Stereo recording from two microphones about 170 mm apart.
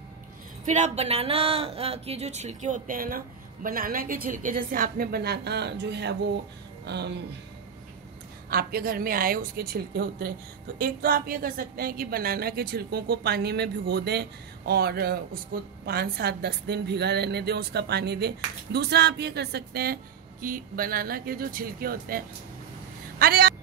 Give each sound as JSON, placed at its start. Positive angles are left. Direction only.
{"t": 0.7, "sound": "speech", "side_deg": -45}
{"t": 8.5, "sound": "a woman's voice", "side_deg": -60}